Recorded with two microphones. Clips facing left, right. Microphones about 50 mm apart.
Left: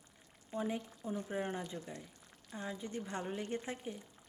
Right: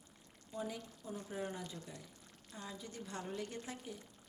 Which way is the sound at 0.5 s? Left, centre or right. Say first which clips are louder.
Left 5 dB; left.